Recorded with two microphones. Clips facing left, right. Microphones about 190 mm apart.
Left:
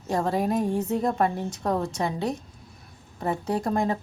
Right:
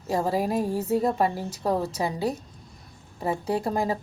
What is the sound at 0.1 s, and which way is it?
Speech, 5° right (ahead or behind).